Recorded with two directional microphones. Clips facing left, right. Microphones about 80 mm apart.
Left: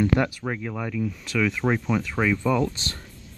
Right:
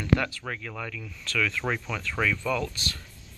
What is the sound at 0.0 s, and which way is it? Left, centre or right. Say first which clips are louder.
Speech: left 4 dB; left.